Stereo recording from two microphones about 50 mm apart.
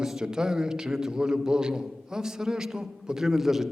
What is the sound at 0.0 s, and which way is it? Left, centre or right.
A man's voice, centre.